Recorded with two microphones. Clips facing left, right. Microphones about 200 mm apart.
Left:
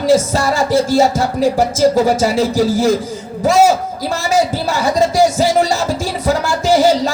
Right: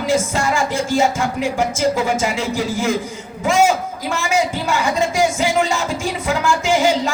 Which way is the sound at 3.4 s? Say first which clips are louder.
Left 4 dB; 35° left (ahead or behind).